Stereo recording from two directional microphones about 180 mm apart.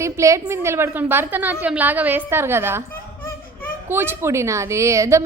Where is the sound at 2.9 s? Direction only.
10° left (ahead or behind).